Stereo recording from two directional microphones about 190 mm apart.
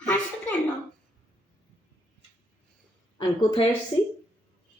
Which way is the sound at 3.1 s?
20° left (ahead or behind).